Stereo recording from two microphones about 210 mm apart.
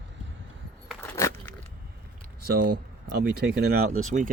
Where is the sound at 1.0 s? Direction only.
10° left (ahead or behind).